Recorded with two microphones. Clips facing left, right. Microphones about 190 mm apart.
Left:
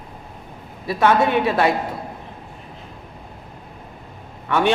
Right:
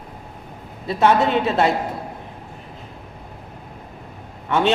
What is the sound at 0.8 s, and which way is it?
Speech, 25° right (ahead or behind).